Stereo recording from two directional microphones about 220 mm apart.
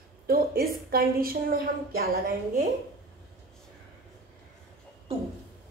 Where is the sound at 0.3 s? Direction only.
45° right (ahead or behind).